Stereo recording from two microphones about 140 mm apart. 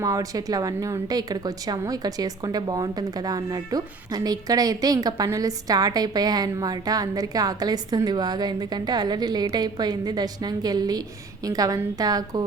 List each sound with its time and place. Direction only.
0.0 s speech: 25° right (ahead or behind)